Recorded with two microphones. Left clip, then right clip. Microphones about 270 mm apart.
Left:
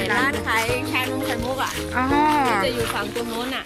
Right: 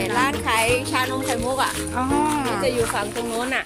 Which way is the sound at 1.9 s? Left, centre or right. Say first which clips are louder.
Left 6 dB; centre.